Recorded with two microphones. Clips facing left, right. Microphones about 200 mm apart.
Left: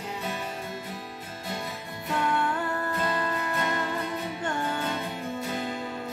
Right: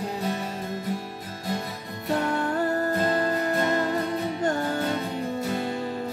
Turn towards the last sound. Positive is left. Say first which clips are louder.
# right 5 dB
turn(degrees=-40)  # may be behind; listen again after turning